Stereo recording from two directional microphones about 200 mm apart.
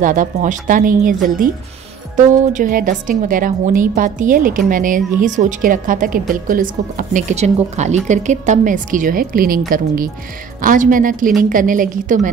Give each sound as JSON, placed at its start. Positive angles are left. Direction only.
{"t": 0.0, "sound": "a woman's voice", "side_deg": -40}
{"t": 10.6, "sound": "a woman's voice", "side_deg": -40}